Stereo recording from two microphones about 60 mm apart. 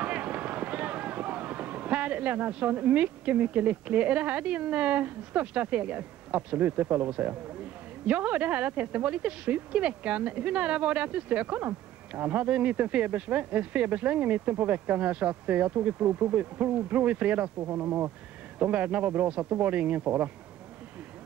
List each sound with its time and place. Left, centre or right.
0.0 s speech: right
8.1 s speech: right
11.4 s speech: right
17.6 s speech: right
18.6 s speech: right